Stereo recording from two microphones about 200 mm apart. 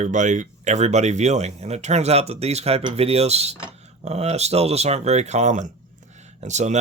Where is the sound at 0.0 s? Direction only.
40° right (ahead or behind).